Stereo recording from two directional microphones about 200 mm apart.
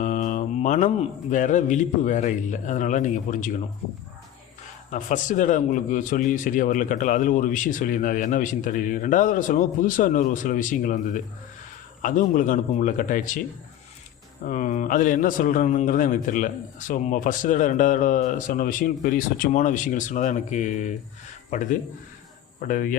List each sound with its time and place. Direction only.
0.0 s a man's voice: 40° left (ahead or behind)
4.9 s a man's voice: 40° left (ahead or behind)
14.4 s a man's voice: 40° left (ahead or behind)